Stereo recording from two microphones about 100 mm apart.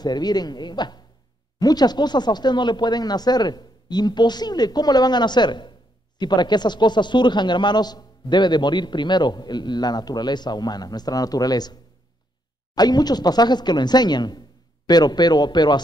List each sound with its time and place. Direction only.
0.0 s speech: 45° left (ahead or behind)